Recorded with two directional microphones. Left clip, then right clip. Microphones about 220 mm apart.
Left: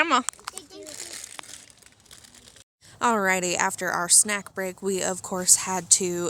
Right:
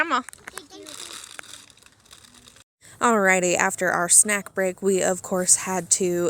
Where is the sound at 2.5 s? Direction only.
25° right (ahead or behind).